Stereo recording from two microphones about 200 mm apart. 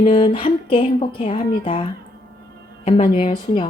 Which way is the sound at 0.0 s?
25° left (ahead or behind).